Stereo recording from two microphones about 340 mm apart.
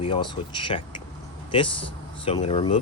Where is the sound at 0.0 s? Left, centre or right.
Centre.